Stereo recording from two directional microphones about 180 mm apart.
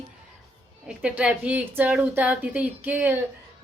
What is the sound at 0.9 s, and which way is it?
A woman's voice, 5° right (ahead or behind).